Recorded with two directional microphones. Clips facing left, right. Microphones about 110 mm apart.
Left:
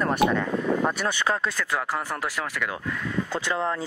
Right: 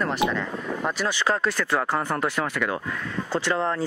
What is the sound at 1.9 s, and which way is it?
Speech, 5° left (ahead or behind).